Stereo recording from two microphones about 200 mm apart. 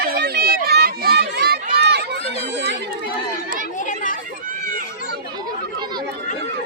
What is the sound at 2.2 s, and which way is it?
Chatter, 30° left (ahead or behind).